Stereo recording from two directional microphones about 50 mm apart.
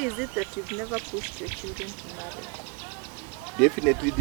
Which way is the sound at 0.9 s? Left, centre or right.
Right.